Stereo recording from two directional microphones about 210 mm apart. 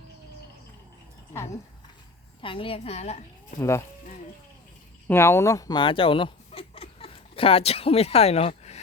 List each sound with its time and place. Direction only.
1.3 s speech: 10° left (ahead or behind)
2.4 s a woman's voice: 25° left (ahead or behind)
3.6 s speech: 15° left (ahead or behind)
5.0 s speech: 10° left (ahead or behind); by 8.8 s 30° left (ahead or behind)